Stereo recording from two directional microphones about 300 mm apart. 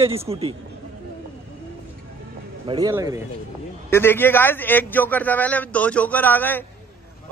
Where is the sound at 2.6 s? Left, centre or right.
Centre.